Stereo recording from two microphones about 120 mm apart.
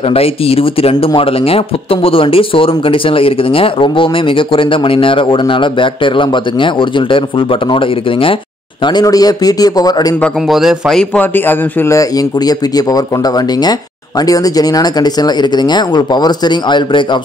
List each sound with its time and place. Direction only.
0.1 s speech: 55° left (ahead or behind)
8.8 s speech: 35° left (ahead or behind)
10.5 s a man's voice: 5° right (ahead or behind)
11.1 s a man's voice: 15° left (ahead or behind)
12.0 s speech: 30° left (ahead or behind)
14.2 s speech: 30° left (ahead or behind)